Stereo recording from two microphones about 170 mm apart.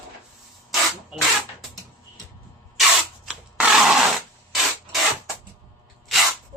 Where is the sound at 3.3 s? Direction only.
5° right (ahead or behind).